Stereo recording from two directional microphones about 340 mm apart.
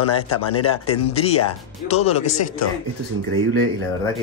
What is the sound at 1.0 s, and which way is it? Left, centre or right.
Speech, centre.